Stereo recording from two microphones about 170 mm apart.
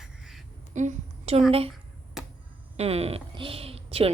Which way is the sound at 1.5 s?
35° right (ahead or behind).